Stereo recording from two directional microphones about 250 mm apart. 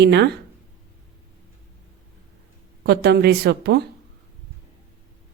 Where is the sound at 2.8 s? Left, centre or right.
Right.